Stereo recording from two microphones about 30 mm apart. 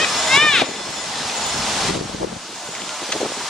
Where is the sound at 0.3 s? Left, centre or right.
Centre.